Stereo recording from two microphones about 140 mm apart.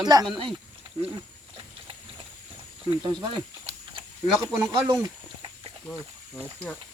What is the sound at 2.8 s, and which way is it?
Speech, 30° right (ahead or behind).